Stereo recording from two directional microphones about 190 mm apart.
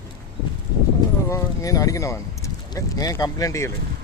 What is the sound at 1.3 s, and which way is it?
Speech, 15° left (ahead or behind).